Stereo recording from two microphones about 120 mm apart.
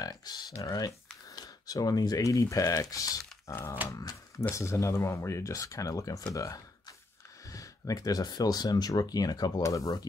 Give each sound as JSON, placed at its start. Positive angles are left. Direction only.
{"t": 0.0, "sound": "speech", "side_deg": 30}